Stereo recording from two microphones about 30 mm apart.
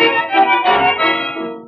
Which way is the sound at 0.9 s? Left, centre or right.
Left.